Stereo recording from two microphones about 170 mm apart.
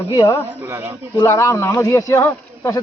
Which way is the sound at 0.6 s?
15° right (ahead or behind).